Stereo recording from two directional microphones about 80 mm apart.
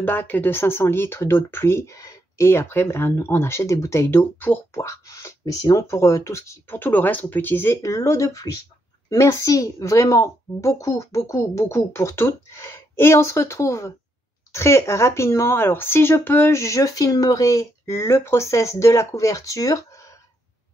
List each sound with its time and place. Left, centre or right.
0.0 s speech: left
4.2 s speech: left
4.7 s speech: left